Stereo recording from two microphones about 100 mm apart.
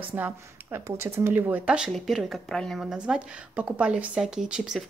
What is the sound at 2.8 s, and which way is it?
Speech, 10° right (ahead or behind).